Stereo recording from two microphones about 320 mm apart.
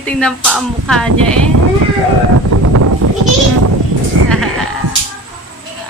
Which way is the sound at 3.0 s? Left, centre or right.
Right.